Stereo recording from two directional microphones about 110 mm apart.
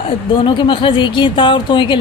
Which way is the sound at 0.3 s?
50° left (ahead or behind).